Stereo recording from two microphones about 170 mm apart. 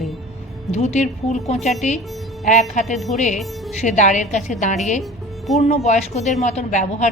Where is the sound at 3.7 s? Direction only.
45° left (ahead or behind).